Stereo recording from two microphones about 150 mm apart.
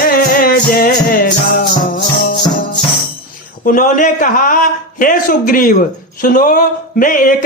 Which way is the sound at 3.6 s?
65° left (ahead or behind).